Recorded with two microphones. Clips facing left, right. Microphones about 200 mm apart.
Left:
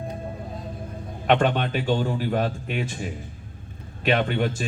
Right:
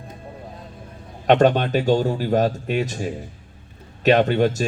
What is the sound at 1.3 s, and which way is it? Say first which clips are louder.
A man's voice: right 5 dB; 40° right (ahead or behind).